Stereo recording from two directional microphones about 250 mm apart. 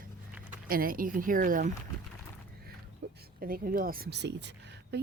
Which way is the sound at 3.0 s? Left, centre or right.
Right.